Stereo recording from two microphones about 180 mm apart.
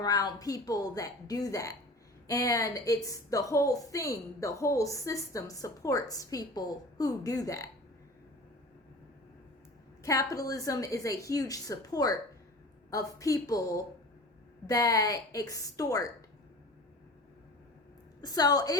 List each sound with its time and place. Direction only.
0.0 s a woman's voice: 20° left (ahead or behind)
10.0 s a woman's voice: 20° left (ahead or behind)
18.2 s a woman's voice: 20° left (ahead or behind)